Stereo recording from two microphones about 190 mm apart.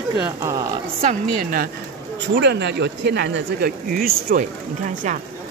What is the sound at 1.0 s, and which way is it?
Speech, 45° right (ahead or behind).